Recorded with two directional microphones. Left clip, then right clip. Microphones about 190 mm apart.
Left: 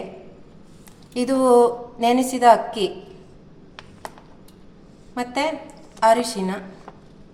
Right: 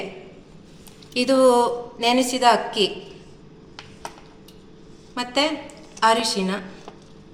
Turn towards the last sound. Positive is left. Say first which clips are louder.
# left 2 dB
turn(degrees=60)  # may be behind; listen again after turning